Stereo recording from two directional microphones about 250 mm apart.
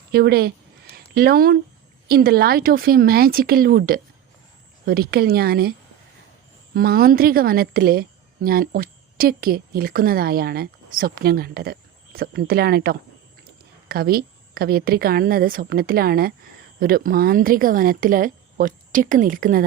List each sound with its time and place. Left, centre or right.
0.1 s a sound: right
1.1 s a woman's voice: right
6.7 s a woman's voice: right